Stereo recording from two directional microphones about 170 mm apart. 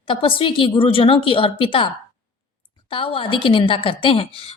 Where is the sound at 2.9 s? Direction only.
30° left (ahead or behind).